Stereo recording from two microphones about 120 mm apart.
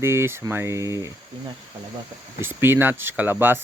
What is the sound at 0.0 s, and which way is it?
Speech, 20° right (ahead or behind).